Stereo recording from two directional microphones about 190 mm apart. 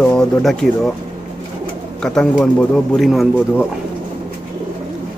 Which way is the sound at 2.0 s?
5° left (ahead or behind).